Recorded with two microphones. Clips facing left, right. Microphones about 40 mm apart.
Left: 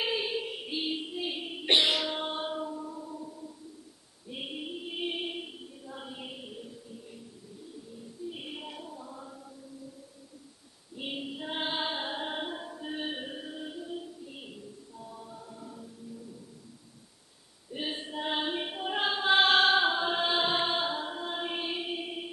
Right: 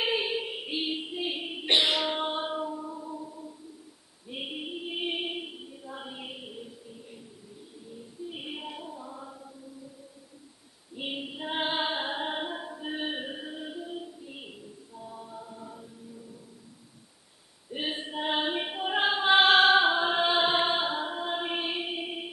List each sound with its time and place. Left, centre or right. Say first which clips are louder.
0.0 s a sound: right 2 dB; centre
1.7 s child singing: right 1 dB; centre
2.0 s music: right 3 dB; right
4.3 s female singing: right 2 dB; centre
8.3 s a sound: right 3 dB; centre
11.0 s female singing: right 2 dB; centre
17.7 s choir: right 2 dB; right